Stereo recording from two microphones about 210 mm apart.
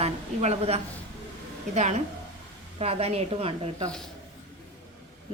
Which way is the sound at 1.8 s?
35° right (ahead or behind).